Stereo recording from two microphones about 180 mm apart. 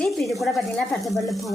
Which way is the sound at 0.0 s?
Centre (ahead or behind).